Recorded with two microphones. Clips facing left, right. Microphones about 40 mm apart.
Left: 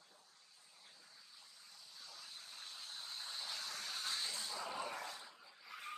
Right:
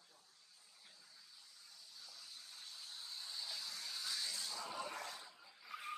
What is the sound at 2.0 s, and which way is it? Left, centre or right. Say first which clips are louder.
Vehicle: left 3 dB; left.